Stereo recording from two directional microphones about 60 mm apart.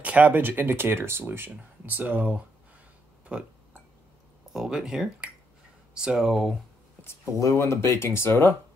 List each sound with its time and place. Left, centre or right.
0.0 s speech: right
4.5 s speech: centre
7.3 s speech: left